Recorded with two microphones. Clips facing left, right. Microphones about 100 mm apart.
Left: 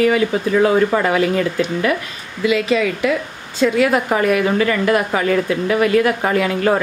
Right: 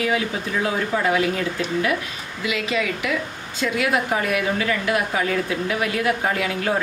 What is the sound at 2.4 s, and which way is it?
A woman's voice, 40° left (ahead or behind).